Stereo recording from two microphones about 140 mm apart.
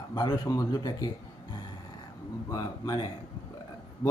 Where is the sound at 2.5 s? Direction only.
30° left (ahead or behind).